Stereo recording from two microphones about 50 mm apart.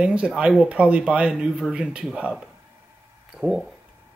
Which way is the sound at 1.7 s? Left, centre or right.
Right.